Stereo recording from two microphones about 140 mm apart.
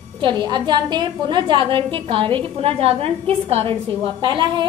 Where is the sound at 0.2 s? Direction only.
35° right (ahead or behind).